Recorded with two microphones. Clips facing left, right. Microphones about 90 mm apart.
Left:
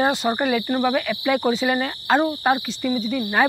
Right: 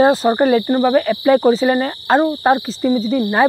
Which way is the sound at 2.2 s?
20° right (ahead or behind).